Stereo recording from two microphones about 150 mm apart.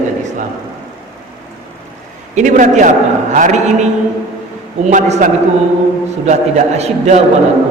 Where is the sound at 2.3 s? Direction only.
55° right (ahead or behind).